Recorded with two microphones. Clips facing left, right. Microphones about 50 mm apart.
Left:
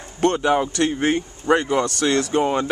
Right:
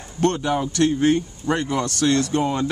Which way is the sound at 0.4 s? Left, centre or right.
Left.